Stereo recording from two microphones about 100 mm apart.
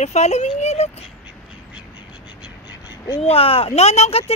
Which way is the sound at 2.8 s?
45° left (ahead or behind).